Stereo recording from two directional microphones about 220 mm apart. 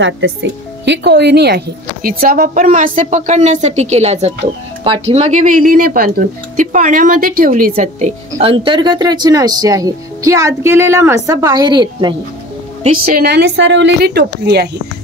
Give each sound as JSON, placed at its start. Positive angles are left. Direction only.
{"t": 0.0, "sound": "speech", "side_deg": -55}
{"t": 8.3, "sound": "speech", "side_deg": -25}
{"t": 12.8, "sound": "speech", "side_deg": -40}